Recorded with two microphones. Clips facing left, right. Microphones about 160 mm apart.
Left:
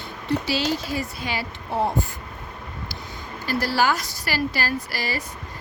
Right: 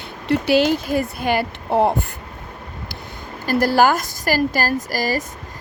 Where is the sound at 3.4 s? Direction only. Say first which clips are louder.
Right 7 dB; 50° right (ahead or behind).